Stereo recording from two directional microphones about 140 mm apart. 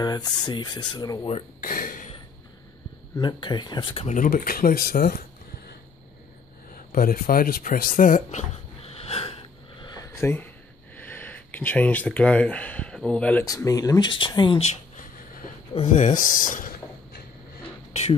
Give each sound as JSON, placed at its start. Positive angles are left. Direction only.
{"t": 0.0, "sound": "speech", "side_deg": 30}
{"t": 1.6, "sound": "a sound", "side_deg": 75}
{"t": 3.2, "sound": "speech", "side_deg": 35}
{"t": 3.9, "sound": "speech", "side_deg": 45}
{"t": 4.2, "sound": "speech", "side_deg": 85}
{"t": 6.7, "sound": "a sound", "side_deg": 90}
{"t": 10.2, "sound": "speech", "side_deg": 15}
{"t": 13.5, "sound": "speech", "side_deg": 25}
{"t": 15.9, "sound": "speech", "side_deg": 70}